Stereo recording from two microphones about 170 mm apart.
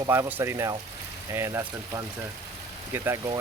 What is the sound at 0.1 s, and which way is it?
Speech, 15° right (ahead or behind).